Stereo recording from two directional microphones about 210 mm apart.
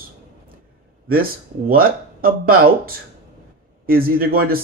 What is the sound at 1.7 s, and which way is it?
Speech, 45° right (ahead or behind).